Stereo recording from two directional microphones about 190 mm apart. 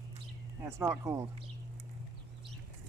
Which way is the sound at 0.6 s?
10° right (ahead or behind).